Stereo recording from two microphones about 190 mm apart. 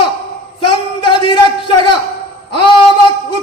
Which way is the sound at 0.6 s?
25° left (ahead or behind).